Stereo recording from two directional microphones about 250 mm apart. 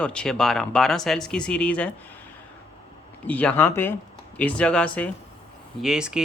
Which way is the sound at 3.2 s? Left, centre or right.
Centre.